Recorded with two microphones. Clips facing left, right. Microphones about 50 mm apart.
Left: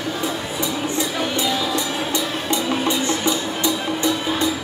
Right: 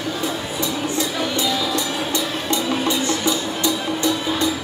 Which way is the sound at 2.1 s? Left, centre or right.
Left.